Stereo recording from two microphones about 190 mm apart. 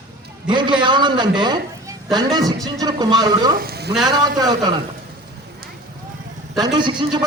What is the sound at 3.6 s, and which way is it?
Speech, 55° right (ahead or behind).